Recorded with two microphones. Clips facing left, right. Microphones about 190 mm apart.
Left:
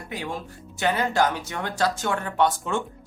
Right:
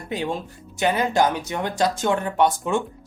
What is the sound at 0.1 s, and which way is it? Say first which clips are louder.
Speech: right 6 dB; 20° right (ahead or behind).